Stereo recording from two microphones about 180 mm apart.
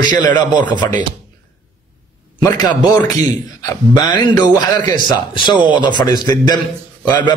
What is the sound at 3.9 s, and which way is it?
A man's voice, 25° left (ahead or behind).